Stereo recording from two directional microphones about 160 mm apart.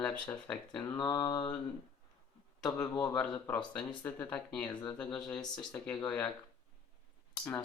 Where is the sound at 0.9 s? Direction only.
20° left (ahead or behind).